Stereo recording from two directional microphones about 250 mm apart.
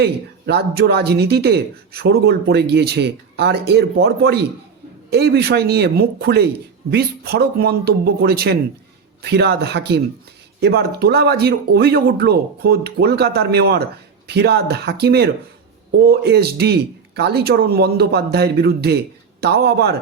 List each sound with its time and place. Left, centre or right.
0.0 s speech: right